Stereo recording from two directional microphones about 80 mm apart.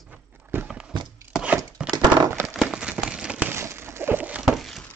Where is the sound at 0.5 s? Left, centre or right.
Right.